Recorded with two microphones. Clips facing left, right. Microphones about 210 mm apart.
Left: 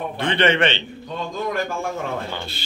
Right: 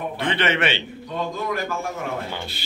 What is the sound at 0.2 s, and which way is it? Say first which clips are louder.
Speech: left 4 dB; 5° right (ahead or behind).